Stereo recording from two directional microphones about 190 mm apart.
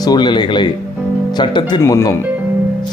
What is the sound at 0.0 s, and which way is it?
Speech, 20° left (ahead or behind).